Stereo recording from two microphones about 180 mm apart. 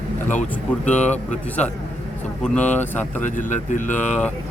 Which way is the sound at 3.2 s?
45° left (ahead or behind).